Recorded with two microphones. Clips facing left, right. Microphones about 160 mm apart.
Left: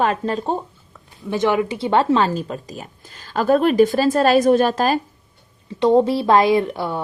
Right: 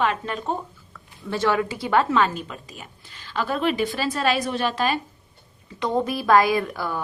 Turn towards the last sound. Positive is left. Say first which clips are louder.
# left 6 dB
turn(degrees=25)  # may be behind; listen again after turning